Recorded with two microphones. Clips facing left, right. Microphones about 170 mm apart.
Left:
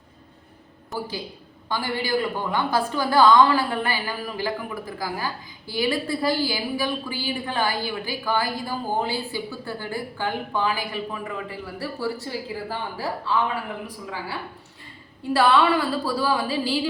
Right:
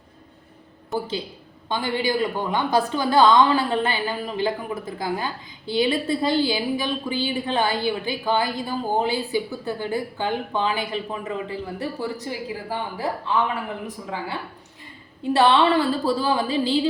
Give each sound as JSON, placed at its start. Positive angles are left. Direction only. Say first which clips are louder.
{"t": 1.7, "sound": "a woman's voice", "louder": "right 1 dB", "side_deg": -20}